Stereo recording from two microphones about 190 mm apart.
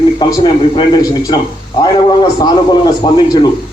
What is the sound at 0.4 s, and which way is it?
Speech, 20° left (ahead or behind).